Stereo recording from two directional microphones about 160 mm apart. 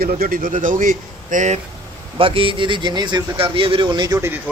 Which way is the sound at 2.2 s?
35° right (ahead or behind).